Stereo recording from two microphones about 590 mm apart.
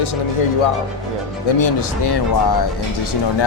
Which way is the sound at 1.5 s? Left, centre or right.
Left.